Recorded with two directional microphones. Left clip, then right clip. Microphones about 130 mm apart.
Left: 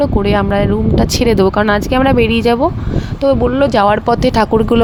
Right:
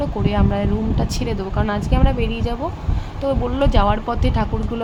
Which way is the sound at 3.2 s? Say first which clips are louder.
Left 8 dB; 45° left (ahead or behind).